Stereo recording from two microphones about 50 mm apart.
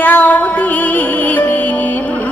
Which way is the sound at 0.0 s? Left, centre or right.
Left.